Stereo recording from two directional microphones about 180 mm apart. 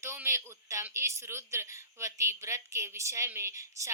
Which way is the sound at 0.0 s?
15° right (ahead or behind).